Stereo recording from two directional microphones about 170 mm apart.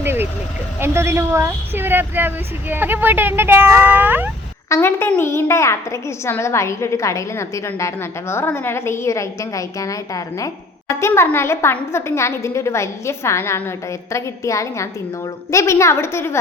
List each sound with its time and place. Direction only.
0.0 s vehicle: 10° right (ahead or behind)
0.8 s a woman's voice: 15° right (ahead or behind)
4.7 s a child's voice: 15° left (ahead or behind)